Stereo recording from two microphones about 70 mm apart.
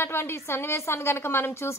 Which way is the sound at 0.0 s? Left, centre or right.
Left.